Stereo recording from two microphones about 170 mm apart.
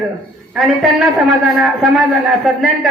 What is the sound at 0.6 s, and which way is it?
A man's voice, centre (ahead or behind).